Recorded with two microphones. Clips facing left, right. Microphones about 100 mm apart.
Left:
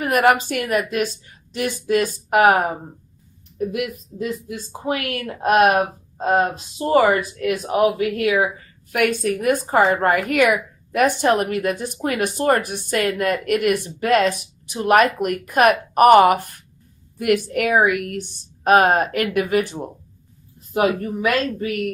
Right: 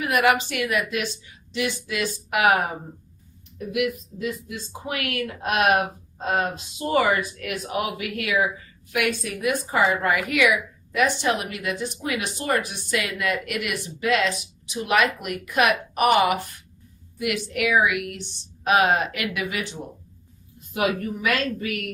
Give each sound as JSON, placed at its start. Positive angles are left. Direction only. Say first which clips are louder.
{"t": 0.0, "sound": "a woman's voice", "louder": "left 4 dB", "side_deg": 45}
{"t": 8.9, "sound": "a woman's voice", "louder": "left 6 dB", "side_deg": 45}
{"t": 20.6, "sound": "a woman's voice", "louder": "left 5 dB", "side_deg": 35}